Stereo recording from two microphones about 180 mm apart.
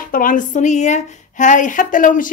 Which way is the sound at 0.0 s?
50° left (ahead or behind).